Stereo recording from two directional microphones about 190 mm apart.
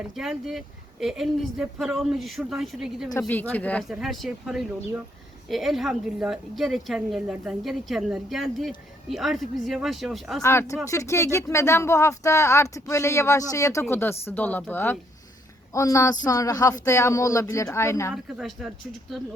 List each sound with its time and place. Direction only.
0.2 s a woman's voice: 5° right (ahead or behind)
3.1 s a woman's voice: 15° left (ahead or behind)
10.4 s a woman's voice: 15° left (ahead or behind)
18.1 s a woman's voice: centre (ahead or behind)